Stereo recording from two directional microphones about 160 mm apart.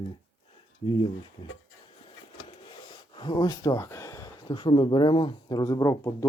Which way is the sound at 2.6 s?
30° left (ahead or behind).